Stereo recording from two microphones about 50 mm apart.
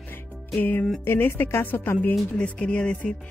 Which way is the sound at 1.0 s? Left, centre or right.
Left.